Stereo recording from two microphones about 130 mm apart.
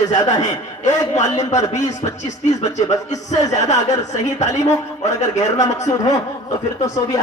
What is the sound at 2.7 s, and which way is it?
Speech, 65° left (ahead or behind).